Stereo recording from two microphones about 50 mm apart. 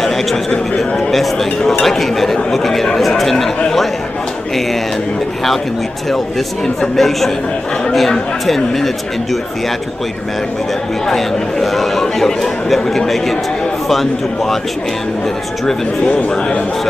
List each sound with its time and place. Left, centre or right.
0.7 s a sound: centre
1.2 s speech: centre
6.8 s speech: centre
11.1 s speech: centre
16.0 s a man's voice: left